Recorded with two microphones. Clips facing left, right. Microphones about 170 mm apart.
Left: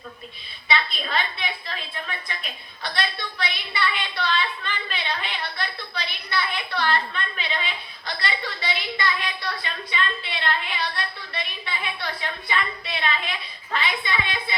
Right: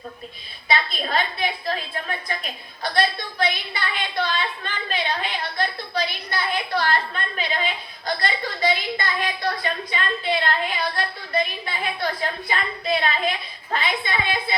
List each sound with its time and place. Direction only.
0.7 s a woman's voice: 45° right (ahead or behind)